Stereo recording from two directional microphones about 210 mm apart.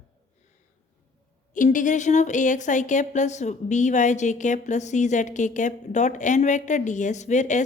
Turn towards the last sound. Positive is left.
turn(degrees=35)  # may be behind; listen again after turning